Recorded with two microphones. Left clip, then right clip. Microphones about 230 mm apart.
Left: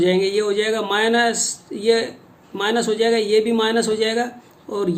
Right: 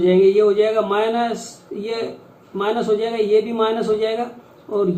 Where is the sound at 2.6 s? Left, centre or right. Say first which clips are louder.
Even; left.